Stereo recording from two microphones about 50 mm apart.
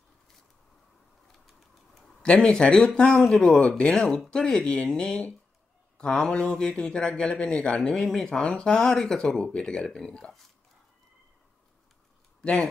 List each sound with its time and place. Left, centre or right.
2.7 s a man's voice: centre
3.5 s speech: centre
3.9 s a man's voice: centre
8.3 s a man's voice: centre
12.4 s speech: centre